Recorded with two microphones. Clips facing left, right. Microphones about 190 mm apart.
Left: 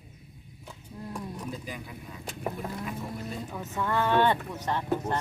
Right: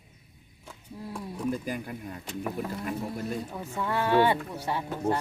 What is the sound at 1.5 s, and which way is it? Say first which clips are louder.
Speech: right 7 dB; 50° right (ahead or behind).